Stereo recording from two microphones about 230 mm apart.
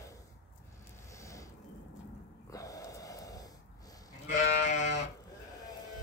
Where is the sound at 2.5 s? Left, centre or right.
Centre.